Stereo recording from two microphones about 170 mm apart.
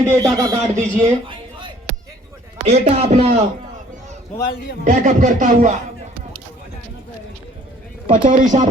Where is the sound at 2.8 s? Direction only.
40° right (ahead or behind).